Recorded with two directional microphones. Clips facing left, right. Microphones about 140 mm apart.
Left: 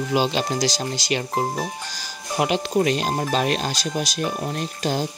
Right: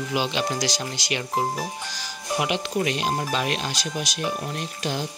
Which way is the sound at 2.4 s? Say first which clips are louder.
Left 5 dB; 35° left (ahead or behind).